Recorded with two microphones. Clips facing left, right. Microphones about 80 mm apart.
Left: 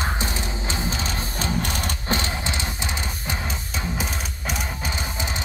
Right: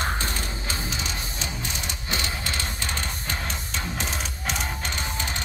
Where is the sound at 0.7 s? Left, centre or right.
Left.